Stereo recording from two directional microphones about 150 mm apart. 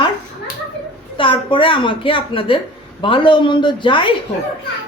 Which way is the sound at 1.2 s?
35° left (ahead or behind).